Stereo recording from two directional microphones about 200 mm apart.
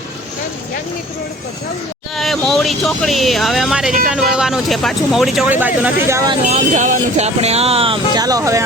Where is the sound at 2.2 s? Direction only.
Centre (ahead or behind); by 6.3 s 15° right (ahead or behind).